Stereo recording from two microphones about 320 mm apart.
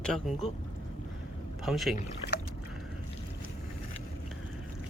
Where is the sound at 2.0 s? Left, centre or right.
Left.